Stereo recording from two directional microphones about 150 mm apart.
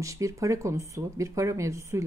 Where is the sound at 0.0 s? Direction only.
20° right (ahead or behind).